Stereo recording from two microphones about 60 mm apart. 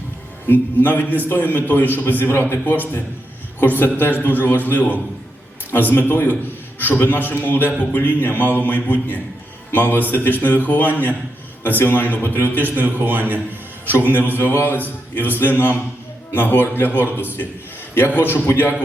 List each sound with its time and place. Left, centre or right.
0.4 s a man's voice: left
12.5 s a man's voice: right
14.3 s a man's voice: left